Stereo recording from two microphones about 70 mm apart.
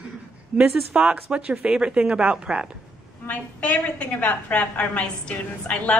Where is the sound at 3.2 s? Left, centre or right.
Left.